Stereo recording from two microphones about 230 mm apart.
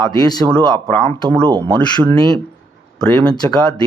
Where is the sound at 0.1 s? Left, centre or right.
Centre.